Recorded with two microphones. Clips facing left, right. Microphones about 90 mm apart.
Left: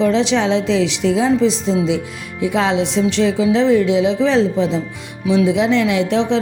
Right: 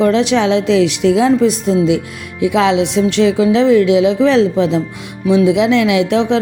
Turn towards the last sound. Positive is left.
turn(degrees=-55)  # may be behind; listen again after turning